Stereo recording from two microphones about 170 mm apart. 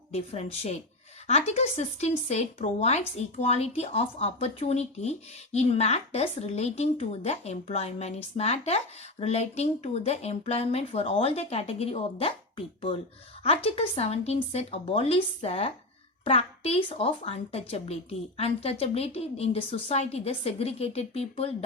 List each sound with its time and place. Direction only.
0.1 s speech: 40° left (ahead or behind)